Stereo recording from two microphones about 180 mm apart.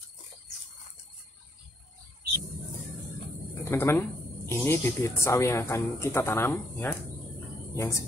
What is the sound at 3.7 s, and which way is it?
Speech, 15° left (ahead or behind).